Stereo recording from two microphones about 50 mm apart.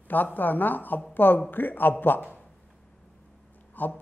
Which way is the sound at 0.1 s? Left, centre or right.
Left.